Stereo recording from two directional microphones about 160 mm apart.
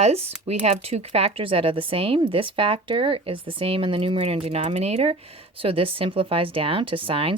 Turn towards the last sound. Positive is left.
turn(degrees=-35)  # may be behind; listen again after turning